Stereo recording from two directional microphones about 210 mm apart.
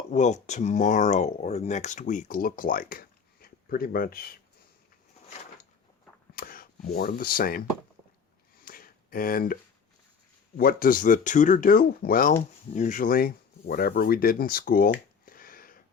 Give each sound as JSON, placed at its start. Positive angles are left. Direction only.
{"t": 0.1, "sound": "speech", "side_deg": 35}
{"t": 6.3, "sound": "speech", "side_deg": 45}
{"t": 8.6, "sound": "a sound", "side_deg": 40}
{"t": 10.6, "sound": "speech", "side_deg": 45}